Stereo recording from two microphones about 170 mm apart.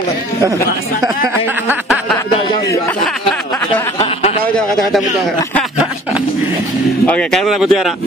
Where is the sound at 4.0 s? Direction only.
40° left (ahead or behind).